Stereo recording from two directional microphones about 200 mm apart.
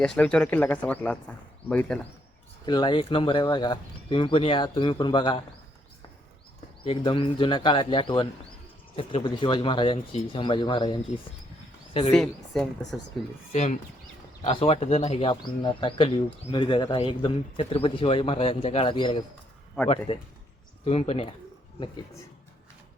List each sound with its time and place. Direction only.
0.0 s speech: 5° left (ahead or behind)
2.6 s speech: 20° left (ahead or behind)
6.8 s speech: 25° left (ahead or behind)
12.1 s speech: centre (ahead or behind)
13.5 s speech: 35° left (ahead or behind)
19.8 s speech: 5° left (ahead or behind)
20.8 s speech: 30° left (ahead or behind)